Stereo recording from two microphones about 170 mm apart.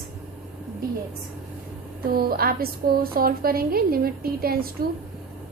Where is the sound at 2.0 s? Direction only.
60° right (ahead or behind).